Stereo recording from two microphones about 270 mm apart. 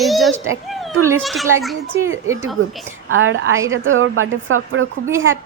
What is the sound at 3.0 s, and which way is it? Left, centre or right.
Speech, right.